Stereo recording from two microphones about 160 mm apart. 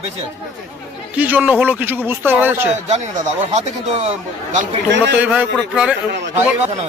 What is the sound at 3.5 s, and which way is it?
Speech, 45° right (ahead or behind).